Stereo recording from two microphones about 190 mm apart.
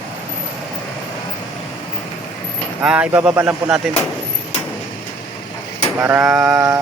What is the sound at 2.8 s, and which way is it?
Speech, 5° right (ahead or behind).